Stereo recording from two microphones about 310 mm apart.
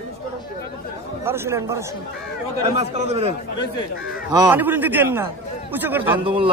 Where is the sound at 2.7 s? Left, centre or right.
Right.